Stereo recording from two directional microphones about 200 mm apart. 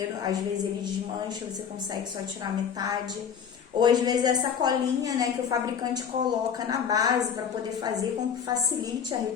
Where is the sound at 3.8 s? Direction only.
20° right (ahead or behind).